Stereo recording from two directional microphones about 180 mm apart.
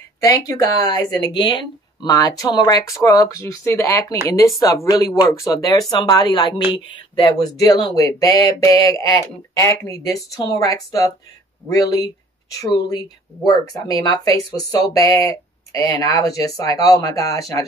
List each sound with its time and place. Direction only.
0.2 s speech: 20° left (ahead or behind)